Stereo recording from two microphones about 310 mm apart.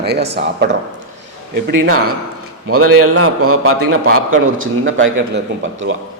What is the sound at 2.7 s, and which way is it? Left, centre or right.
A man's voice, right.